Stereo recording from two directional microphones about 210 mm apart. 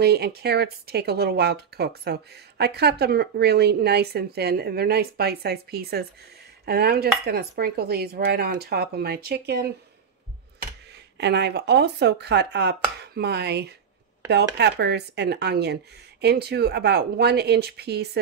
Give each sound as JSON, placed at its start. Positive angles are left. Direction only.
{"t": 0.0, "sound": "speech", "side_deg": -50}
{"t": 11.1, "sound": "speech", "side_deg": -55}
{"t": 13.0, "sound": "chopping", "side_deg": -50}
{"t": 14.2, "sound": "speech", "side_deg": -55}